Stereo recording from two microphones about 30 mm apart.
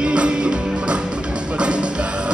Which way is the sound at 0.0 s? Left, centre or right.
Right.